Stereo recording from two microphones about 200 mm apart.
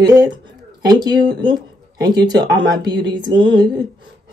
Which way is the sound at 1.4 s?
20° right (ahead or behind).